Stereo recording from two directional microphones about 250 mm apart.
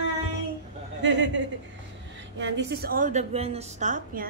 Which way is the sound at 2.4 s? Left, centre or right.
Right.